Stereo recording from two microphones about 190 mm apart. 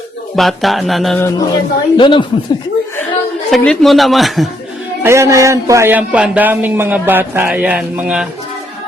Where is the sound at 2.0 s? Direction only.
25° left (ahead or behind).